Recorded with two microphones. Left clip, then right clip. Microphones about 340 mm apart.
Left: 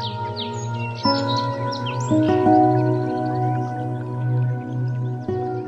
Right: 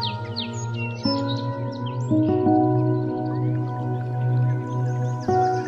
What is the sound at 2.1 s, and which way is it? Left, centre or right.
Music, left.